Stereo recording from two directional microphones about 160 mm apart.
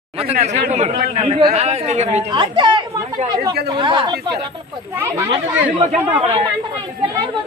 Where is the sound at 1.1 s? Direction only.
30° right (ahead or behind).